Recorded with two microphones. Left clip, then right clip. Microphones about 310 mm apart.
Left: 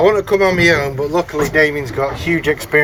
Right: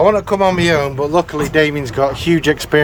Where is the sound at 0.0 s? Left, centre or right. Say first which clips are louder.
Even; centre.